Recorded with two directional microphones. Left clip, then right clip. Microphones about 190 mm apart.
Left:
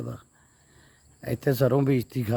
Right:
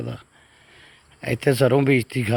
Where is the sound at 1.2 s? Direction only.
5° right (ahead or behind).